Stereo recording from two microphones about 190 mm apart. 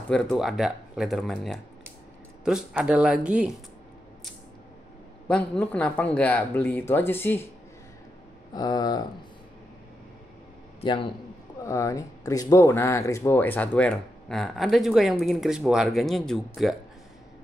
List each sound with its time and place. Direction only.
0.1 s speech: 5° left (ahead or behind)
5.3 s speech: 5° left (ahead or behind)
8.5 s speech: 20° left (ahead or behind)
10.8 s a man's voice: 25° left (ahead or behind)
11.6 s speech: 15° left (ahead or behind); by 16.7 s centre (ahead or behind)